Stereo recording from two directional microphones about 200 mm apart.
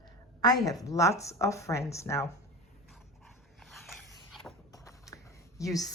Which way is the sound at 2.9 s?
Centre (ahead or behind).